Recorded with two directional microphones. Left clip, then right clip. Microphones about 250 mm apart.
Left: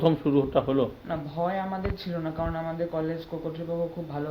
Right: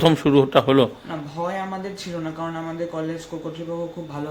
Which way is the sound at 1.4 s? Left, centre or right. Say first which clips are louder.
Right 2 dB; centre.